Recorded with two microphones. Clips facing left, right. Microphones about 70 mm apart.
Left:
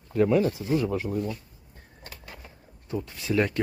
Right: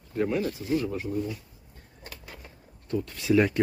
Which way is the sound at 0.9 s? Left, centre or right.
Left.